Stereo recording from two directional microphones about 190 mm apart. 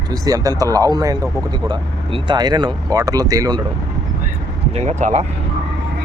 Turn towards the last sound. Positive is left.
turn(degrees=-35)  # may be behind; listen again after turning